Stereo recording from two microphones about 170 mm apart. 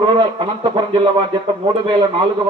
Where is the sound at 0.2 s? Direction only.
25° right (ahead or behind).